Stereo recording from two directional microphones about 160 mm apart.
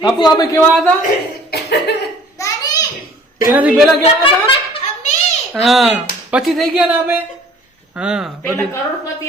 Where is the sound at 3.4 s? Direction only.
10° right (ahead or behind).